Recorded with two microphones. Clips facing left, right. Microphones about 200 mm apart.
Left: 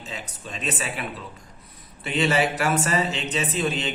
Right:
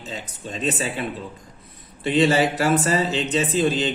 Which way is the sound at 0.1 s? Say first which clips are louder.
Right 5 dB; 30° right (ahead or behind).